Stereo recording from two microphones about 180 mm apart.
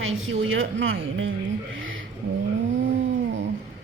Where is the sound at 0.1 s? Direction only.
90° right.